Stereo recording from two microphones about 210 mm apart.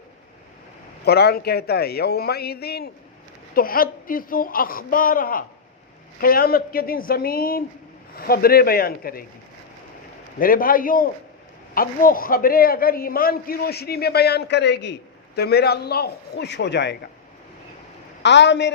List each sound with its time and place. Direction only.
1.0 s a man's voice: 50° left (ahead or behind)
10.4 s a man's voice: 40° left (ahead or behind)
18.2 s a woman's voice: 55° left (ahead or behind)